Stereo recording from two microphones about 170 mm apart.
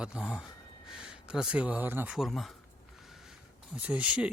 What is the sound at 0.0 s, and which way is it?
Speech, 5° right (ahead or behind).